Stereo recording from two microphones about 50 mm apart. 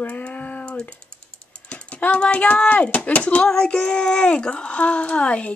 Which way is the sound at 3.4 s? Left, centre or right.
Centre.